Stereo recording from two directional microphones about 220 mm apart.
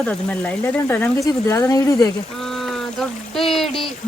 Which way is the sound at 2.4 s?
Centre (ahead or behind).